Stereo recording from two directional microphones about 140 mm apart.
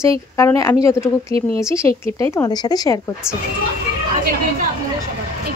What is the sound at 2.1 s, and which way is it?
Speech, 20° left (ahead or behind).